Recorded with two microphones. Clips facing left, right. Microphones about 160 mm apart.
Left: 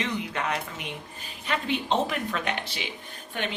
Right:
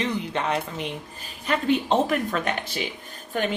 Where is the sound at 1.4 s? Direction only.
45° right (ahead or behind).